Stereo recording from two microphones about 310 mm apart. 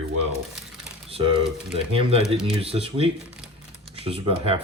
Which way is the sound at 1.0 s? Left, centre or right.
Centre.